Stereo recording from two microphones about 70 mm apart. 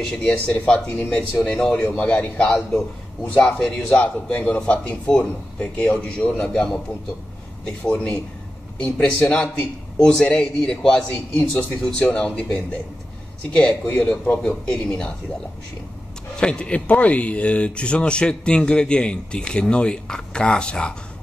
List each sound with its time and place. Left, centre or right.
0.0 s speech: centre
8.8 s speech: centre
11.1 s speech: left
16.3 s speech: centre